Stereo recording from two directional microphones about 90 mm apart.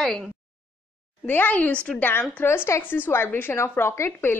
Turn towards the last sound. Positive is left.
turn(degrees=30)  # may be behind; listen again after turning